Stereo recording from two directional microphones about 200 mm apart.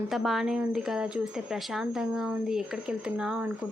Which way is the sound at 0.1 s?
Centre (ahead or behind).